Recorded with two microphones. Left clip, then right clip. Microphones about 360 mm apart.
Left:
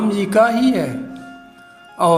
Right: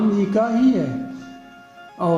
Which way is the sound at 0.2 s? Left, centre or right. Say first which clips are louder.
Left 8 dB; left.